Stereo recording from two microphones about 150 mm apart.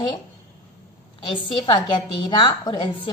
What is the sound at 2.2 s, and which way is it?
Speech, 30° left (ahead or behind).